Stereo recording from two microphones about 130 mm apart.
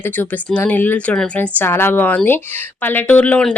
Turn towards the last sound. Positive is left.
turn(degrees=10)  # may be behind; listen again after turning